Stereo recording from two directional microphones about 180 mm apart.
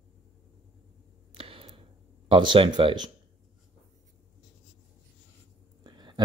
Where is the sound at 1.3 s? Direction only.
30° right (ahead or behind).